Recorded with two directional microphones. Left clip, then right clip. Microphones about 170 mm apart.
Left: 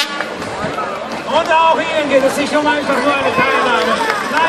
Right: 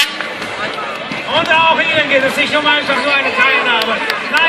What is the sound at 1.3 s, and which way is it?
Speech, 5° left (ahead or behind).